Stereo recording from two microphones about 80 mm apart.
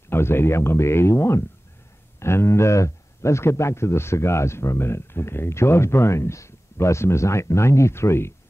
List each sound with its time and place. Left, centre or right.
0.1 s speech: left